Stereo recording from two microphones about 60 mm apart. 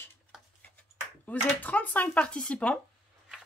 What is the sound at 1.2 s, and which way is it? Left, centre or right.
Speech, left.